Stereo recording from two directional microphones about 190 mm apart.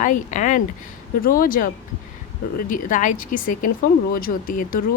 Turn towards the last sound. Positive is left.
turn(degrees=50)  # may be behind; listen again after turning